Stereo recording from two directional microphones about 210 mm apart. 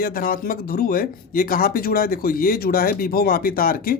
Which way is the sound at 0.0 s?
45° left (ahead or behind).